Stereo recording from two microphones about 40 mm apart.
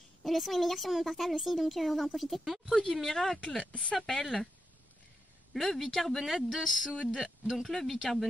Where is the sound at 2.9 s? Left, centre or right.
Centre.